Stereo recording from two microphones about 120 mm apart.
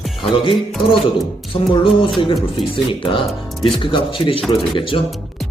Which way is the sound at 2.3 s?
45° left (ahead or behind).